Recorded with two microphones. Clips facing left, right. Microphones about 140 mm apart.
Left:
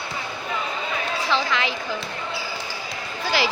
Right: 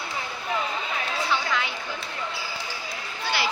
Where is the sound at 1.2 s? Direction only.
90° left.